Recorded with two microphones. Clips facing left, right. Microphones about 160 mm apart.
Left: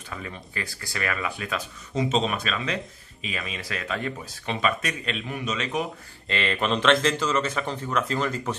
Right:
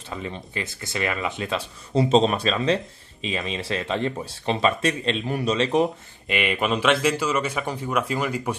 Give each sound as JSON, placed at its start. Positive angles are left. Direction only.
{"t": 0.1, "sound": "speech", "side_deg": -25}
{"t": 6.2, "sound": "speech", "side_deg": -15}